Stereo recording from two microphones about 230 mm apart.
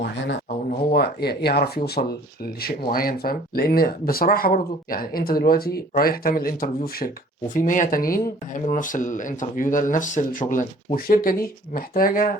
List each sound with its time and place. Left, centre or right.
0.9 s speech: left